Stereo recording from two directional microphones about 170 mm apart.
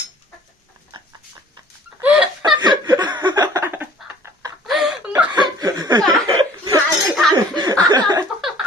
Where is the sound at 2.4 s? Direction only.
25° right (ahead or behind).